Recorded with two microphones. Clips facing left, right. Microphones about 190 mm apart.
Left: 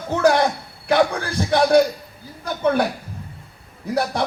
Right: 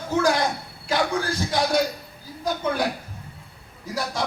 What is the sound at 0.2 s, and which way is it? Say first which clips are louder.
Speech: left 5 dB; 60° left (ahead or behind).